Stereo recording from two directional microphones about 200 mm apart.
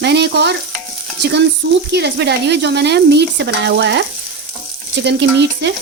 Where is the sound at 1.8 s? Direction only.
55° right (ahead or behind).